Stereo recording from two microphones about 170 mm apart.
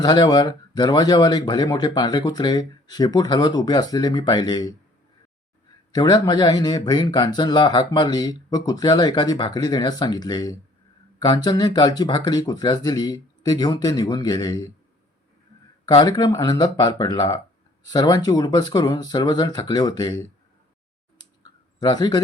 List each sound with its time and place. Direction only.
0.0 s speech: 25° left (ahead or behind)
5.9 s speech: 25° left (ahead or behind)
15.9 s speech: 25° left (ahead or behind)
21.8 s speech: 25° left (ahead or behind)